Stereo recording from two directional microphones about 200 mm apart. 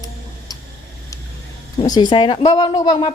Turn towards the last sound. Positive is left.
turn(degrees=20)  # may be behind; listen again after turning